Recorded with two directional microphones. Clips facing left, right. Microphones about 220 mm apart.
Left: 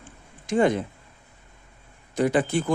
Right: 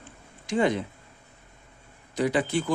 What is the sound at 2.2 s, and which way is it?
Speech, 50° left (ahead or behind).